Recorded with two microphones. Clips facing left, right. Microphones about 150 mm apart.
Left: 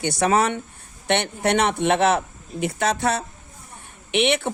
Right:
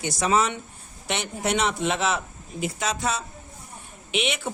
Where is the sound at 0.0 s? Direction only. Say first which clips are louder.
Left 3 dB; 60° left (ahead or behind).